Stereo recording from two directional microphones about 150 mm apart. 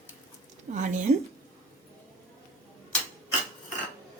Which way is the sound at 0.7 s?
55° right (ahead or behind).